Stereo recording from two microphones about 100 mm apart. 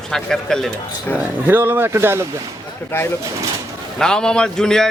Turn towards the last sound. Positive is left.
turn(degrees=5)  # may be behind; listen again after turning